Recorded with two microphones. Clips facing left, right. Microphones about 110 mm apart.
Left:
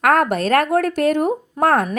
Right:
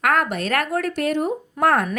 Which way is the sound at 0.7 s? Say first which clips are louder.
Left 5 dB; 50° left (ahead or behind).